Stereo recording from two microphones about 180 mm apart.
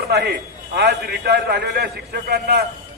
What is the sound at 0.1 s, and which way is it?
A man's voice, 65° right (ahead or behind).